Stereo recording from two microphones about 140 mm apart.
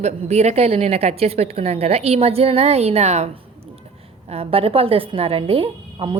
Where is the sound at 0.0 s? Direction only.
50° right (ahead or behind).